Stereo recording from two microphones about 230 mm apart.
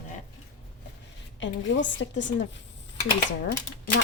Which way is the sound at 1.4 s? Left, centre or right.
Left.